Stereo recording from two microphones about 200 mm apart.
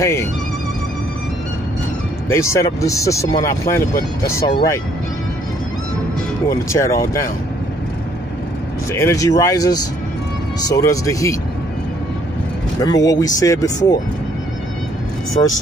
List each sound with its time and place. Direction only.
0.0 s speech: 15° left (ahead or behind)
2.2 s speech: 15° left (ahead or behind)
6.7 s speech: 15° left (ahead or behind)
8.9 s speech: 15° left (ahead or behind)
12.8 s speech: 20° left (ahead or behind)